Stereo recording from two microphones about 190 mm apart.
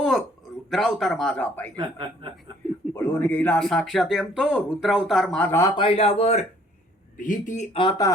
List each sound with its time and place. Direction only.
0.7 s speech: centre (ahead or behind)
1.7 s speech: 25° right (ahead or behind)
2.9 s speech: 15° left (ahead or behind)
5.8 s a man's voice: 30° left (ahead or behind)
7.8 s speech: 20° left (ahead or behind)